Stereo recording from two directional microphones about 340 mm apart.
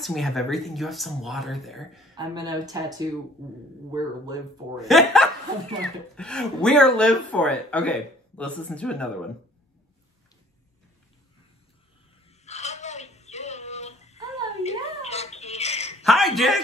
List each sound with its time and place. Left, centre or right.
0.0 s speech: centre
2.1 s speech: centre
4.7 s speech: centre
12.3 s a sound: centre
16.0 s a man's voice: centre